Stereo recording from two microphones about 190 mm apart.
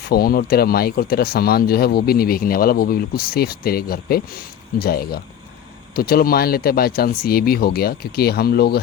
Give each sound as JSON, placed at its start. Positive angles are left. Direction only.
{"t": 0.1, "sound": "speech", "side_deg": 50}